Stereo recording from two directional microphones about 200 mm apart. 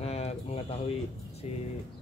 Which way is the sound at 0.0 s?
30° left (ahead or behind).